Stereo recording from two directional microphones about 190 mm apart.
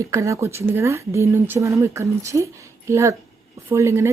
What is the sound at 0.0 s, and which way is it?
A woman's voice, 15° right (ahead or behind).